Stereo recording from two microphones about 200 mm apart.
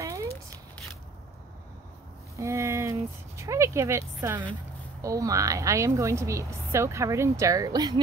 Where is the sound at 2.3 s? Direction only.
15° right (ahead or behind).